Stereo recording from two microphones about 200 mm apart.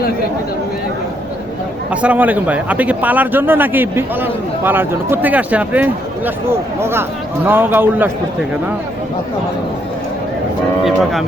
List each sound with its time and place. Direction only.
1.9 s a man's voice: 5° right (ahead or behind)
10.8 s speech: centre (ahead or behind)